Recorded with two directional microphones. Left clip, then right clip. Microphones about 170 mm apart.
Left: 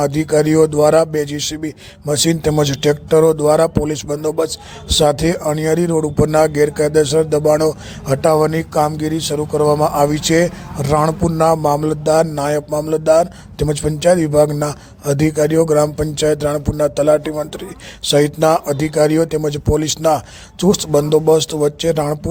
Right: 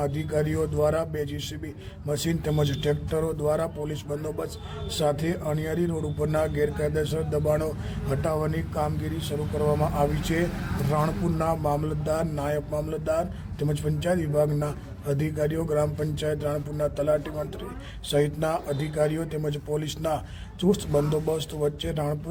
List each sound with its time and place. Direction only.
0.0 s a man's voice: 35° left (ahead or behind)